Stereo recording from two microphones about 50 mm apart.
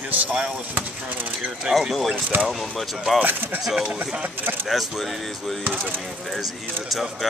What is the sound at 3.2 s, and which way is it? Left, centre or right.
Speech, right.